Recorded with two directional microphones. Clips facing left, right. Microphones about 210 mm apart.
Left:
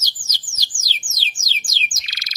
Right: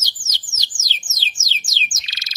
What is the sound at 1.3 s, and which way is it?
Bird, 25° right (ahead or behind).